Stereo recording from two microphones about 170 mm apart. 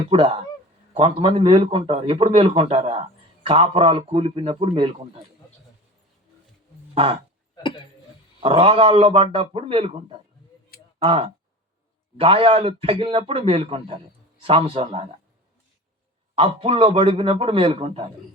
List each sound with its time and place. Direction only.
0.1 s speech: 30° right (ahead or behind)
6.9 s speech: 35° right (ahead or behind)
7.5 s a sound: 30° left (ahead or behind)
8.4 s speech: 30° right (ahead or behind)
16.3 s speech: 30° right (ahead or behind)